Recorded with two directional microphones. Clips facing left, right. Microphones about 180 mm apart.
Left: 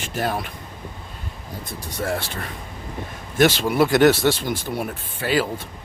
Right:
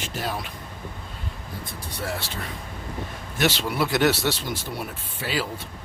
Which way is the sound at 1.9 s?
50° left (ahead or behind).